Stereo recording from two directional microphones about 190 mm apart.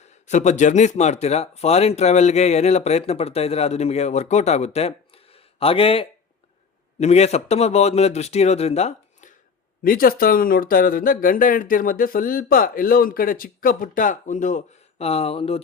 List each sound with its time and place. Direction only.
0.3 s speech: 40° left (ahead or behind)
9.8 s speech: 50° left (ahead or behind); by 15.6 s 30° left (ahead or behind)